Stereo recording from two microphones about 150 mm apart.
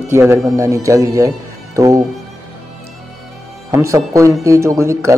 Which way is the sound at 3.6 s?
20° right (ahead or behind).